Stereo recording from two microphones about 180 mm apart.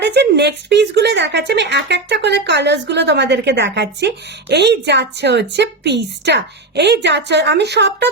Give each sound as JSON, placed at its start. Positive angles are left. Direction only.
{"t": 0.0, "sound": "speech", "side_deg": -70}